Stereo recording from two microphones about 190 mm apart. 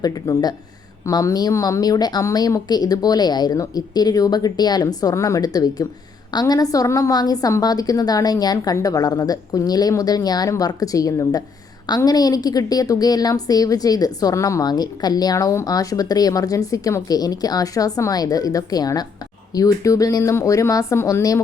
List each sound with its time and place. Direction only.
0.0 s a woman's voice: 20° left (ahead or behind)